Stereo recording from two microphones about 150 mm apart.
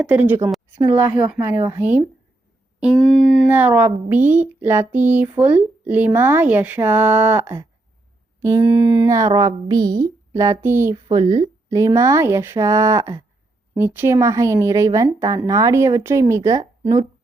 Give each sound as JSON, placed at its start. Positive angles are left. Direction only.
{"t": 0.0, "sound": "speech", "side_deg": -10}
{"t": 2.8, "sound": "a sound", "side_deg": 0}
{"t": 3.4, "sound": "speech", "side_deg": -10}
{"t": 8.4, "sound": "a sound", "side_deg": -20}
{"t": 8.6, "sound": "speech", "side_deg": -10}
{"t": 9.0, "sound": "speech", "side_deg": -20}